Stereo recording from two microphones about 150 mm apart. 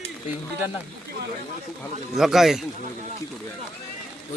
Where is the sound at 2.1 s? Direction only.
Centre (ahead or behind).